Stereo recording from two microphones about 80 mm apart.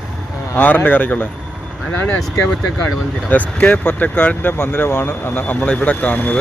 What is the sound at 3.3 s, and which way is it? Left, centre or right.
Speech, centre.